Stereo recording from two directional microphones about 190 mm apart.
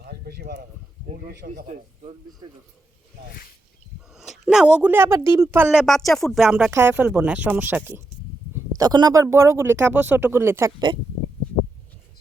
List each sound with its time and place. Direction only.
0.0 s a sound: 55° right (ahead or behind)
1.0 s a man's voice: 40° right (ahead or behind)
2.4 s speech: 25° right (ahead or behind)
4.1 s speech: 5° right (ahead or behind)
5.8 s speech: centre (ahead or behind)
6.7 s speech: 10° right (ahead or behind)